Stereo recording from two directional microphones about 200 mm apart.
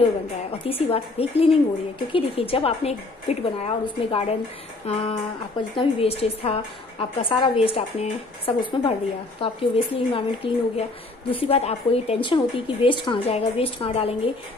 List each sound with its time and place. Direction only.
0.5 s a woman's voice: 30° left (ahead or behind)
4.8 s a sound: 30° left (ahead or behind)
5.8 s a woman's voice: 30° left (ahead or behind)